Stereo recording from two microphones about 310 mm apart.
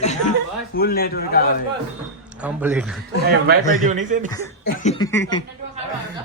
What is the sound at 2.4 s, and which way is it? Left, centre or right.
Speech, centre.